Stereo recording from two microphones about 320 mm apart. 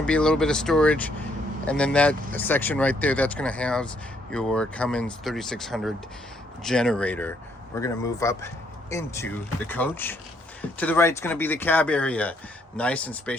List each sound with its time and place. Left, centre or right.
0.0 s speech: centre